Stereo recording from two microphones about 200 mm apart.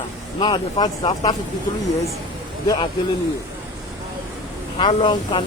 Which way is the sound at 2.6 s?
20° left (ahead or behind).